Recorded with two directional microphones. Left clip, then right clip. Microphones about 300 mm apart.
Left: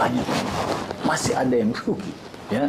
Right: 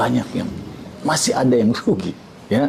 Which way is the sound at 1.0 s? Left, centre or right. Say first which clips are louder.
Right 5 dB; right.